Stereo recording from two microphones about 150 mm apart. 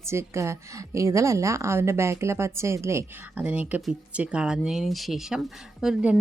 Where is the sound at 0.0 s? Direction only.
15° right (ahead or behind).